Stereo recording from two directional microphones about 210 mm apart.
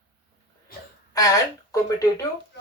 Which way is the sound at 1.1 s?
15° left (ahead or behind).